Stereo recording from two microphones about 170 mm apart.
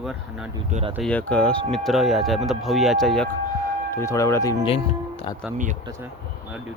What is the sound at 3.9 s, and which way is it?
Speech, 15° left (ahead or behind).